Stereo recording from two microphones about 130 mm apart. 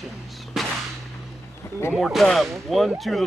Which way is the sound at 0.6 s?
Centre (ahead or behind).